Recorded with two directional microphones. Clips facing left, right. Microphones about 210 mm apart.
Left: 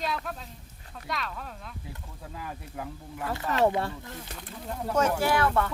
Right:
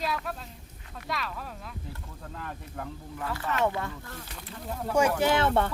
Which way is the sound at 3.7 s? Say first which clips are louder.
Left 4 dB; 25° left (ahead or behind).